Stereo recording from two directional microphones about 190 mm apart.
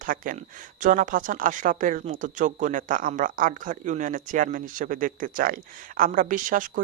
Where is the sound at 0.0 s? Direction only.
45° right (ahead or behind).